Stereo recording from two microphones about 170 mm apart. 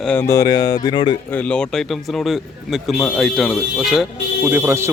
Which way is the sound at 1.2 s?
10° left (ahead or behind).